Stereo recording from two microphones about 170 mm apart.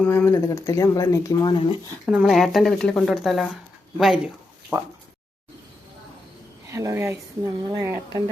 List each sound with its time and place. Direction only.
0.0 s speech: 10° left (ahead or behind); by 1.7 s 25° left (ahead or behind)
2.0 s a woman's voice: 5° right (ahead or behind)
6.7 s a woman's voice: 15° right (ahead or behind)